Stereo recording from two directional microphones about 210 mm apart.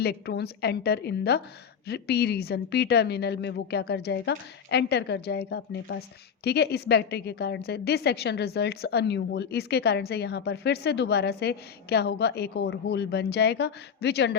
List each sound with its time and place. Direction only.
0.0 s a woman's voice: 50° left (ahead or behind)